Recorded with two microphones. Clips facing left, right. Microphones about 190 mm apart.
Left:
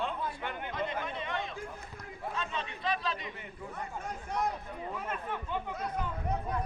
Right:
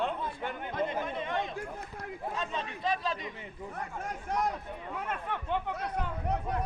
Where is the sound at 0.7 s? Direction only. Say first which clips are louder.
Right 4 dB; 50° right (ahead or behind).